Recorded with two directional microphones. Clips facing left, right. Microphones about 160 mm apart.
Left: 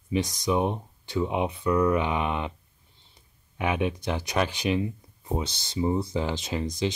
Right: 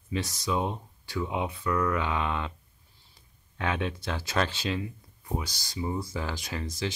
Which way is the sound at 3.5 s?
15° left (ahead or behind).